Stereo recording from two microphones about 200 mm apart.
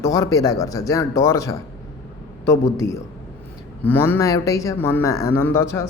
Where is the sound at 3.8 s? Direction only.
10° left (ahead or behind).